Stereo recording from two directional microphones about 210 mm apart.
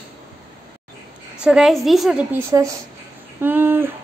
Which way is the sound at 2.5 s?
15° right (ahead or behind).